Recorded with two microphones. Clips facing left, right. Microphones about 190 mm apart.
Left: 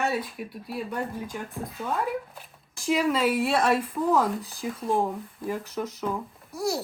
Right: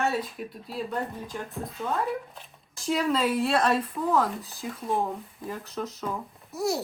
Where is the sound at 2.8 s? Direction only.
5° left (ahead or behind).